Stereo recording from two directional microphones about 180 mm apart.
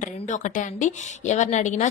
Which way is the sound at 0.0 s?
45° left (ahead or behind).